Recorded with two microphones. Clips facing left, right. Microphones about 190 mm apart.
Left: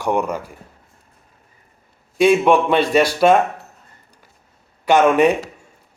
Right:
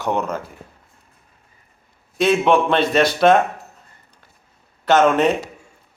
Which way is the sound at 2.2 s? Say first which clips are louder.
Left 2 dB; 10° left (ahead or behind).